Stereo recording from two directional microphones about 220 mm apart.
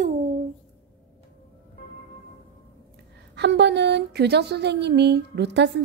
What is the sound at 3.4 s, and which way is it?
Speech, 50° right (ahead or behind).